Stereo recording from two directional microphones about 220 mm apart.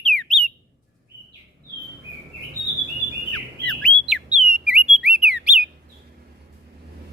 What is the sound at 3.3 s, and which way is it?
Squawk, 5° left (ahead or behind).